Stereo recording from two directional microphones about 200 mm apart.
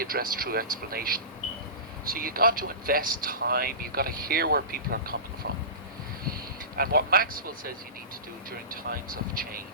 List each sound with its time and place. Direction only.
0.0 s speech: 45° right (ahead or behind)